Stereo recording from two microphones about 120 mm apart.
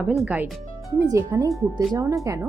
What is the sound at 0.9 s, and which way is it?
Speech, 25° right (ahead or behind).